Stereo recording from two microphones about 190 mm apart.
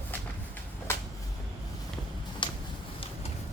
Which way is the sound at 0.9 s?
15° left (ahead or behind).